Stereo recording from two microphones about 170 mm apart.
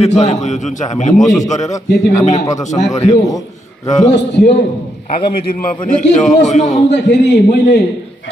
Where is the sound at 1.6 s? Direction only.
20° left (ahead or behind).